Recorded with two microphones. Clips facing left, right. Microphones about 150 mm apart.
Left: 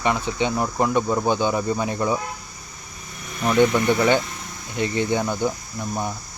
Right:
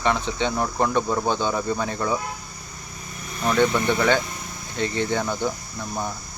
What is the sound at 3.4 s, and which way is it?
Speech, 10° left (ahead or behind).